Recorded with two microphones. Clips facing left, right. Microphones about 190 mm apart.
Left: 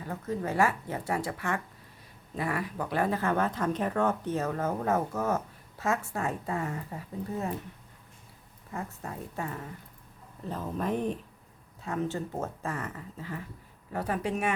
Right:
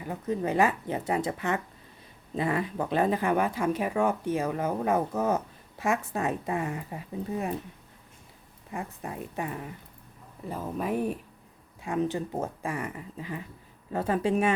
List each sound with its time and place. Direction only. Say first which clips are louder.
0.0 s speech: right 3 dB; 15° right (ahead or behind)
8.7 s speech: right 2 dB; 15° right (ahead or behind)
13.9 s speech: right 5 dB; 25° right (ahead or behind)